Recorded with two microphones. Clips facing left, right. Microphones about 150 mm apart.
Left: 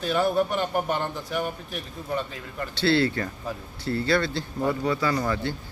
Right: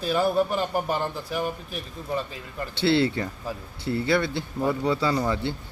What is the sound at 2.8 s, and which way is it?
A man's voice, 20° right (ahead or behind).